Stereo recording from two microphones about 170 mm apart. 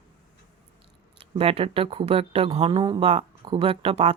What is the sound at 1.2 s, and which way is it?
Speech, 35° right (ahead or behind).